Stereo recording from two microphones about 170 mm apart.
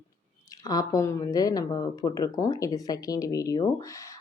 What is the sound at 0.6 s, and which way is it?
Speech, 20° left (ahead or behind).